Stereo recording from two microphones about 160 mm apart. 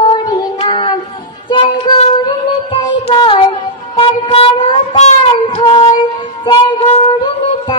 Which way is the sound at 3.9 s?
35° left (ahead or behind).